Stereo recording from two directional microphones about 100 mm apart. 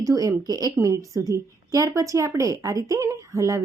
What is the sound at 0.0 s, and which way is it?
Speech, 35° right (ahead or behind).